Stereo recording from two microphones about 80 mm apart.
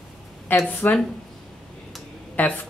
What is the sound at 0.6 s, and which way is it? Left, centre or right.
Speech, left.